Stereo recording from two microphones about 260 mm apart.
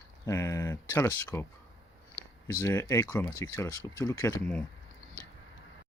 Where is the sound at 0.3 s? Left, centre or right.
Centre.